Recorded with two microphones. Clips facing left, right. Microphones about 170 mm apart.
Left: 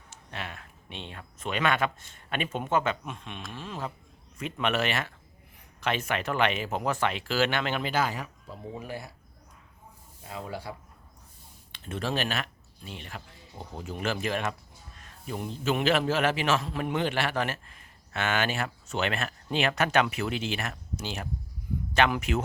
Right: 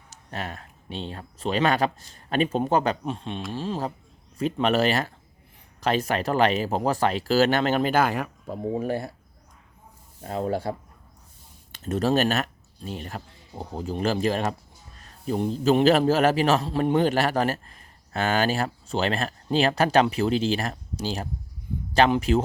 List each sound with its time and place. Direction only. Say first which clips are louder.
0.1 s a man's voice: right 5 dB; 40° right (ahead or behind)
10.2 s a man's voice: right 10 dB; 45° right (ahead or behind); by 22.4 s 30° right (ahead or behind)